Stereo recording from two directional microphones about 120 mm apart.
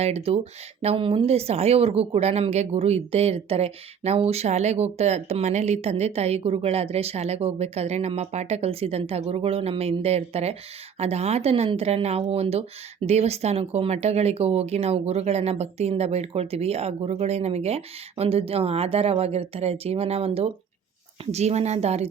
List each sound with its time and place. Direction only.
0.0 s speech: 60° right (ahead or behind)